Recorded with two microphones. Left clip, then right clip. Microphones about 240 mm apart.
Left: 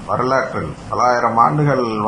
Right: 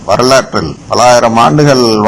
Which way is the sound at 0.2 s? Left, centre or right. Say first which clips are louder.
Right 10 dB; right.